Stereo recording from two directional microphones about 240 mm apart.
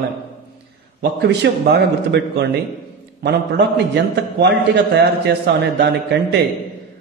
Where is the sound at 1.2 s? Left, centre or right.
Right.